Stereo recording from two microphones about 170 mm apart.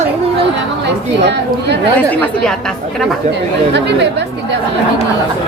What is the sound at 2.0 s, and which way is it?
Speech, 10° left (ahead or behind).